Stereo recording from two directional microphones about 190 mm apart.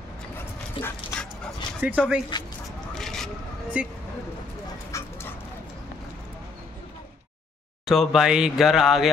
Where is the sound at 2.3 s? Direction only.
25° left (ahead or behind).